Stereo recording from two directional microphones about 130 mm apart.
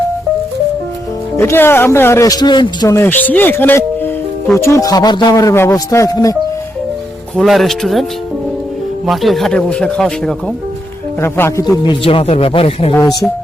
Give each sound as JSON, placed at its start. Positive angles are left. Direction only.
{"t": 1.4, "sound": "speech", "side_deg": 20}
{"t": 2.9, "sound": "speech", "side_deg": 15}
{"t": 7.3, "sound": "speech", "side_deg": 0}
{"t": 9.0, "sound": "speech", "side_deg": 0}
{"t": 11.2, "sound": "speech", "side_deg": 20}
{"t": 11.6, "sound": "speech", "side_deg": 35}
{"t": 12.9, "sound": "speech", "side_deg": 30}